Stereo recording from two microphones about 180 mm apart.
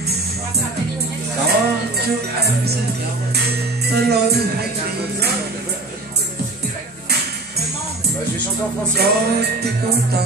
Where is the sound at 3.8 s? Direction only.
65° right (ahead or behind).